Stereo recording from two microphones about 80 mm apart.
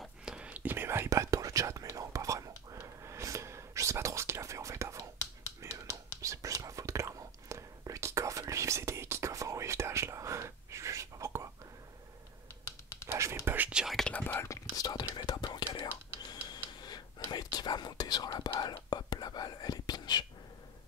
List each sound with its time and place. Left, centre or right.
0.2 s whispering: centre; by 11.4 s right
13.1 s whispering: right
13.7 s whispering: centre
13.9 s whispering: centre
14.2 s whispering: left
14.5 s whispering: left